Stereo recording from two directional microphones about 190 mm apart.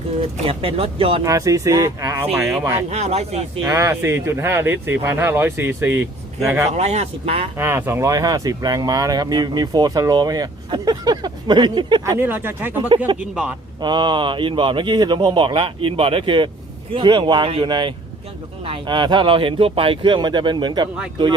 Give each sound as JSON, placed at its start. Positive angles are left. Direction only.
{"t": 0.4, "sound": "speech", "side_deg": -30}
{"t": 1.2, "sound": "speech", "side_deg": -15}
{"t": 2.9, "sound": "speech", "side_deg": -35}
{"t": 3.6, "sound": "speech", "side_deg": -15}
{"t": 6.7, "sound": "speech", "side_deg": -35}
{"t": 7.5, "sound": "speech", "side_deg": -10}
{"t": 13.8, "sound": "speech", "side_deg": -25}